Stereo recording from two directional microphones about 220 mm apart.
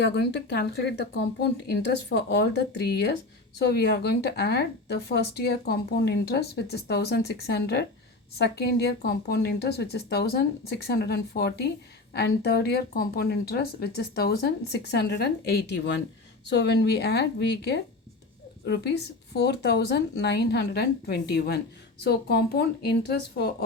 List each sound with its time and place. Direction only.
0.0 s speech: 50° left (ahead or behind)